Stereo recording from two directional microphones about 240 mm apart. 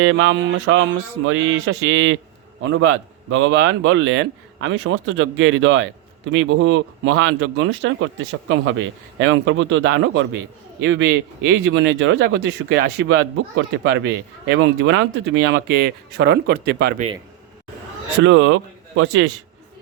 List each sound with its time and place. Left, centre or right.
0.0 s speech: right
18.2 s speech: right